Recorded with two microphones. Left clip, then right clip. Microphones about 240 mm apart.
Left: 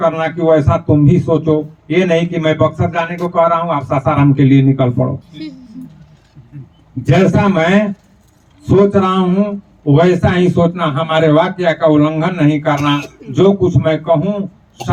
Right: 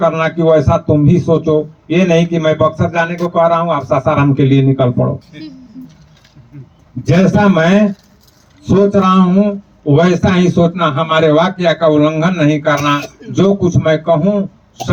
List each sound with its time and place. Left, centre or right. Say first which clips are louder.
0.1 s speech: right 1 dB; right
7.3 s speech: right 1 dB; right